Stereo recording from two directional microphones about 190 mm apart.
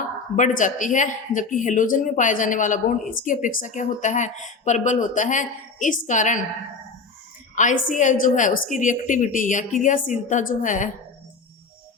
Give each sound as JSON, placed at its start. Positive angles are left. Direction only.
{"t": 0.3, "sound": "speech", "side_deg": 40}
{"t": 7.5, "sound": "speech", "side_deg": 45}